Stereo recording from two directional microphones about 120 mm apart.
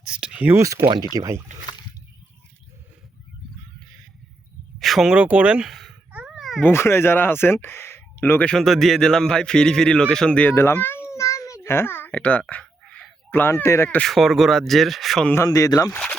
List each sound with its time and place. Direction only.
0.0 s speech: 5° right (ahead or behind)
0.5 s speech: 25° right (ahead or behind)
4.8 s speech: centre (ahead or behind)
6.1 s a sound: 10° right (ahead or behind)
6.6 s speech: 20° left (ahead or behind)
11.2 s a sound: 25° left (ahead or behind)
14.0 s speech: centre (ahead or behind)
15.4 s speech: 30° left (ahead or behind)